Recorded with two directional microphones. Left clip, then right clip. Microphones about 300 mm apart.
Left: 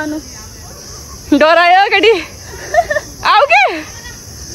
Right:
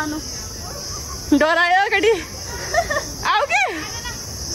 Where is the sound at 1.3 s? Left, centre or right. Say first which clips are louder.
Left 8 dB; centre.